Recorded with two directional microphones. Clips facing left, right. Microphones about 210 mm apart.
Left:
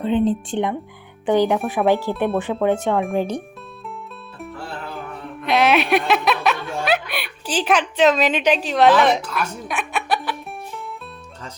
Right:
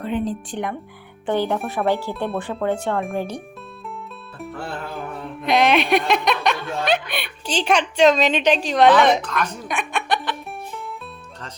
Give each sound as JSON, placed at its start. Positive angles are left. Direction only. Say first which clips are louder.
{"t": 0.0, "sound": "speech", "louder": "left 5 dB", "side_deg": 25}
{"t": 1.3, "sound": "speech", "louder": "left 4 dB", "side_deg": 15}
{"t": 5.5, "sound": "speech", "louder": "even", "side_deg": 5}